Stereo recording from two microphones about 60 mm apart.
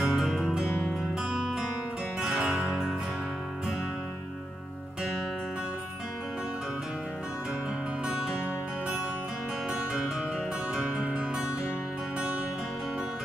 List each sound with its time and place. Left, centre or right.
0.0 s music: centre
9.7 s music: centre